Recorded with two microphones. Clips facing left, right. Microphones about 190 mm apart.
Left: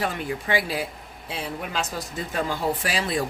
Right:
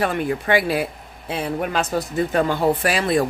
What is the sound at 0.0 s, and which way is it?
Speech, 60° right (ahead or behind).